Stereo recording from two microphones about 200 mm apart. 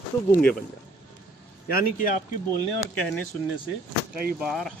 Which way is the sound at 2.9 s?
5° left (ahead or behind).